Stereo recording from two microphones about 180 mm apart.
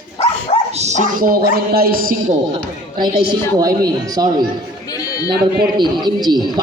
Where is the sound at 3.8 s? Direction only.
20° right (ahead or behind).